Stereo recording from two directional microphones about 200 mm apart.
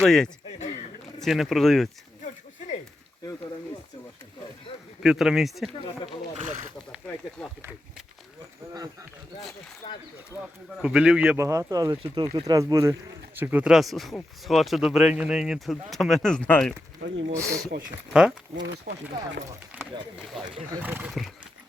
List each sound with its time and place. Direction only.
0.0 s speech: 5° left (ahead or behind)
5.0 s speech: centre (ahead or behind)
8.7 s speech: 20° right (ahead or behind)
9.8 s a sound: 25° left (ahead or behind)
10.8 s speech: 5° right (ahead or behind)
17.0 s speech: 65° right (ahead or behind)
17.7 s speech: 50° right (ahead or behind)
18.1 s speech: 5° right (ahead or behind)
18.6 s speech: 60° right (ahead or behind)
19.5 s a sound: 10° right (ahead or behind)
20.8 s speech: 10° right (ahead or behind)